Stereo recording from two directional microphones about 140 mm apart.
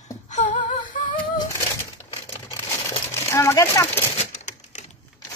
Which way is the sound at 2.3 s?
30° left (ahead or behind).